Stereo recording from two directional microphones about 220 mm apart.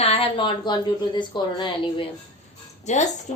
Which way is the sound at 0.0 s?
25° left (ahead or behind).